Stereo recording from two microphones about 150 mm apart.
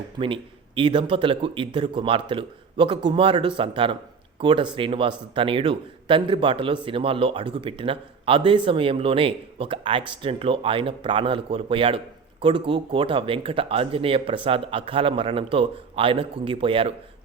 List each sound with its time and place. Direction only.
0.2 s a man's voice: 30° right (ahead or behind)